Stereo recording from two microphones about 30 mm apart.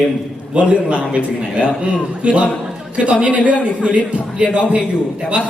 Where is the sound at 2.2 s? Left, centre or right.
Right.